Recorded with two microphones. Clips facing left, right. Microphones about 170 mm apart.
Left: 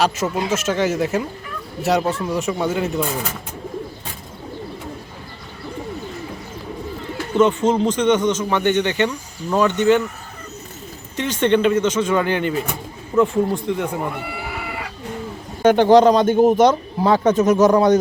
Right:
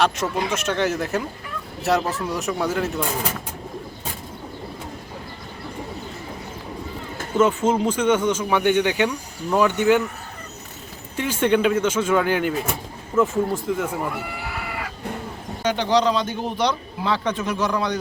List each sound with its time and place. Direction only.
0.0 s speech: 5° left (ahead or behind)
7.3 s speech: 5° right (ahead or behind)
11.2 s speech: 10° right (ahead or behind)
15.6 s speech: 50° left (ahead or behind)